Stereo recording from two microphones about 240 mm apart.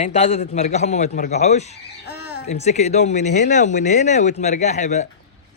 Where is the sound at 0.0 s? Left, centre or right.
Left.